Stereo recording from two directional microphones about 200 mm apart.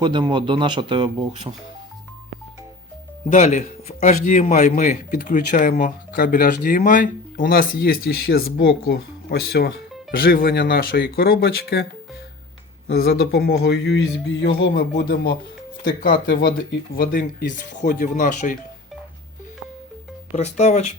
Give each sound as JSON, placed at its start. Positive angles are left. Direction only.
{"t": 0.0, "sound": "speech", "side_deg": -20}
{"t": 3.3, "sound": "a man's voice", "side_deg": 35}
{"t": 12.9, "sound": "a man's voice", "side_deg": 50}
{"t": 20.3, "sound": "speech", "side_deg": 35}